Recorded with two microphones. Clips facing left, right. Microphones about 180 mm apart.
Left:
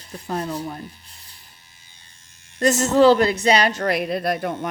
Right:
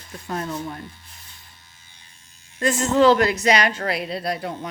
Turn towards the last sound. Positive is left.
turn(degrees=50)  # may be behind; listen again after turning